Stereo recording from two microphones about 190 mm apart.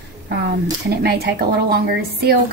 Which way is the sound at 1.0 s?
55° right (ahead or behind).